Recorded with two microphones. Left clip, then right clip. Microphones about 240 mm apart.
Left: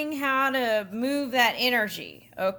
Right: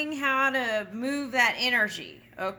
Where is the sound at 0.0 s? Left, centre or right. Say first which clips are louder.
Even; left.